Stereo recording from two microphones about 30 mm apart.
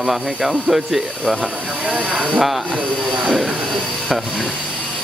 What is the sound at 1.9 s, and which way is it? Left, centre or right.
Speech, right.